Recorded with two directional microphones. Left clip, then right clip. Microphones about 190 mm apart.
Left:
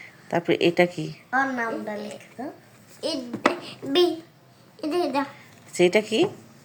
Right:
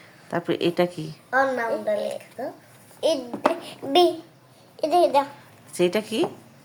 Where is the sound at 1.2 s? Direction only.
25° right (ahead or behind).